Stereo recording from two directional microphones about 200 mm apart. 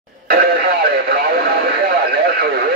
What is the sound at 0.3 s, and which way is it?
Radio, 50° right (ahead or behind).